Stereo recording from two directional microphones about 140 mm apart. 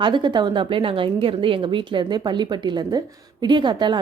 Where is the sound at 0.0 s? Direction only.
35° right (ahead or behind).